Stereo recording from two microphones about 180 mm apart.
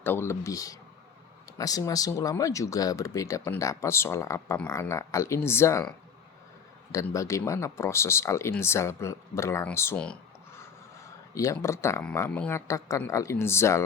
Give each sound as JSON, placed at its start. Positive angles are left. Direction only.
{"t": 0.0, "sound": "speech", "side_deg": 10}
{"t": 6.9, "sound": "speech", "side_deg": 15}